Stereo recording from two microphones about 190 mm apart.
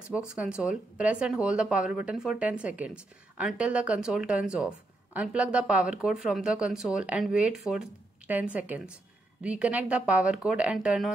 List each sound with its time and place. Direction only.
0.1 s speech: 5° right (ahead or behind)